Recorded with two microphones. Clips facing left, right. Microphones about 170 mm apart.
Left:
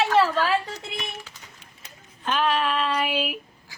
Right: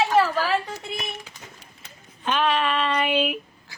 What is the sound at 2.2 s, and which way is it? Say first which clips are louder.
A woman's voice: right 1 dB; centre (ahead or behind).